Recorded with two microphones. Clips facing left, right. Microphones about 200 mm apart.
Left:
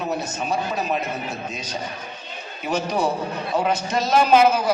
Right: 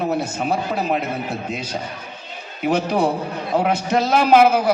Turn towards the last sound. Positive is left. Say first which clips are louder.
# right 2 dB
turn(degrees=-60)  # may be behind; listen again after turning